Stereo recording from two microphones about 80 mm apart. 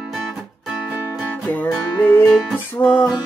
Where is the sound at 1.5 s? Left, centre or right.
Left.